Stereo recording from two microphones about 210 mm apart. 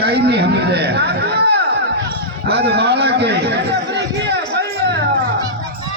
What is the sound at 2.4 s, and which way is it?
Chatter, 50° right (ahead or behind).